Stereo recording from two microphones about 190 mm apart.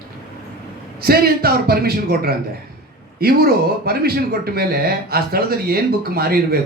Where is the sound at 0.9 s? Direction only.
55° right (ahead or behind).